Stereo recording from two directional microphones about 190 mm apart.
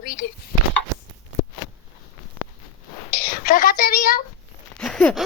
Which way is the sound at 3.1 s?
55° left (ahead or behind).